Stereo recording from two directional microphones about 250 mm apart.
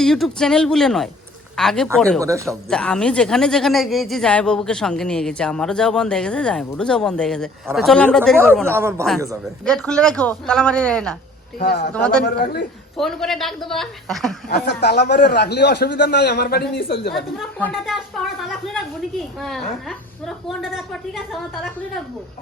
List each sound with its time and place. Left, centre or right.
0.0 s speech: centre
2.2 s speech: centre
2.6 s speech: centre
8.4 s speech: centre
9.6 s speech: centre
11.6 s a man's voice: left
11.9 s speech: centre
12.2 s a man's voice: left
13.0 s speech: centre
14.5 s a man's voice: left
17.2 s speech: centre